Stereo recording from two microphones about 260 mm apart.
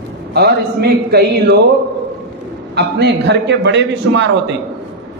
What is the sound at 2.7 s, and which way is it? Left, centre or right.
A man's voice, right.